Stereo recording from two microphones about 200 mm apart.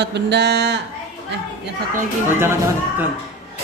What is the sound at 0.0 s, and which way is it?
Speech, 60° right (ahead or behind).